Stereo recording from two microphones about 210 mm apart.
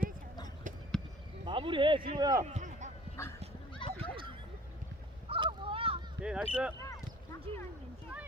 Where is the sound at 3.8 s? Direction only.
25° left (ahead or behind).